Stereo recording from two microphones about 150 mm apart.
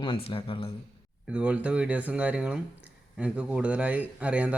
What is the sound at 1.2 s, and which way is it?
Speech, 5° right (ahead or behind).